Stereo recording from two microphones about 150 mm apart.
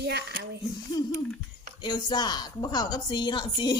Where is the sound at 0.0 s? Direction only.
90° right.